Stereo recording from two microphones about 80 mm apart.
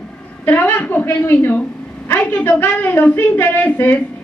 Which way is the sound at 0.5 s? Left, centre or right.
Left.